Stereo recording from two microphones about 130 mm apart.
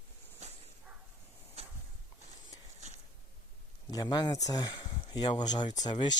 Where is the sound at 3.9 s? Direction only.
30° left (ahead or behind).